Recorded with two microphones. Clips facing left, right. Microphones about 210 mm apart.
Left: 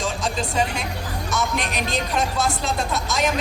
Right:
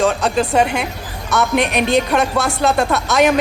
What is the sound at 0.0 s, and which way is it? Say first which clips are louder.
Speech: right 9 dB; 65° right (ahead or behind).